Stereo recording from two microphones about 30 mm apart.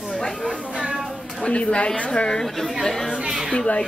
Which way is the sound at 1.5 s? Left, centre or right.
Left.